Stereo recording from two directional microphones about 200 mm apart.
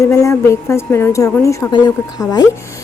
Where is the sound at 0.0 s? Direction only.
15° left (ahead or behind).